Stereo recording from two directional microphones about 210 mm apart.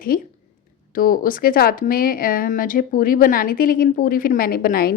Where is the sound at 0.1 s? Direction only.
45° left (ahead or behind).